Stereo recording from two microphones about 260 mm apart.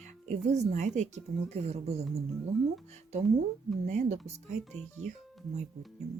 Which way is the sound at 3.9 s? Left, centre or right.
Right.